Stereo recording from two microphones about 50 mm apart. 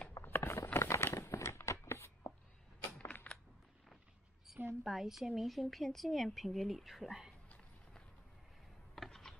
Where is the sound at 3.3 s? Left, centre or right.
Left.